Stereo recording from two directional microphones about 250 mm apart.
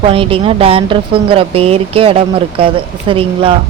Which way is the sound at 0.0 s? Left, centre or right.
Right.